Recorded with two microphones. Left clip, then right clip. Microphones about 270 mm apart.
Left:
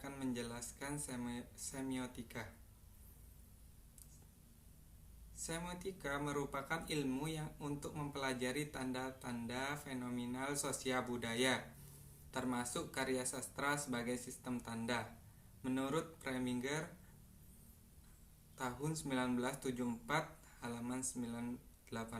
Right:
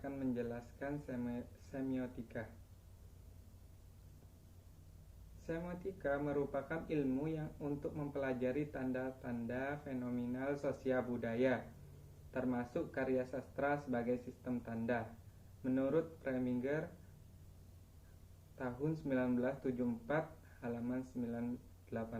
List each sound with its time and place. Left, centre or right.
0.0 s speech: centre
5.5 s speech: centre
18.5 s speech: centre